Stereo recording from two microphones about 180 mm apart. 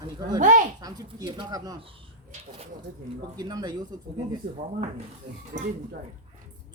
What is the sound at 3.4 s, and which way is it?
Speech, 20° right (ahead or behind).